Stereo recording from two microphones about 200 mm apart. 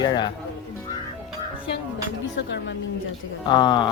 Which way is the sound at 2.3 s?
60° left (ahead or behind).